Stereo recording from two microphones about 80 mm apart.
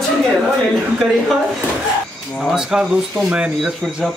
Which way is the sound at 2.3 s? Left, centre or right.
Centre.